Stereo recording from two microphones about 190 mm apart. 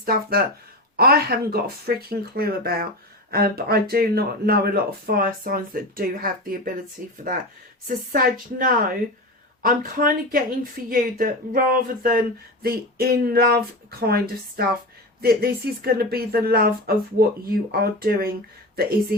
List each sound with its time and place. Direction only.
0.0 s speech: 50° right (ahead or behind)